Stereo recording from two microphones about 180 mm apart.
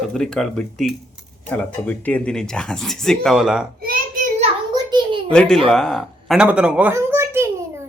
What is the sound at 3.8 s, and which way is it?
Child singing, 50° right (ahead or behind).